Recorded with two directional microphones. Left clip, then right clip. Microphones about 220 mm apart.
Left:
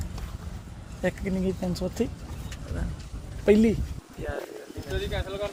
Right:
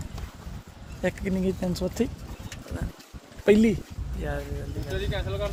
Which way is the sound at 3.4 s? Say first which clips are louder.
Right 1 dB; 10° right (ahead or behind).